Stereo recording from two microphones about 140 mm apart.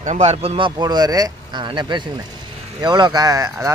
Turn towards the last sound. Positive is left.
turn(degrees=-20)  # may be behind; listen again after turning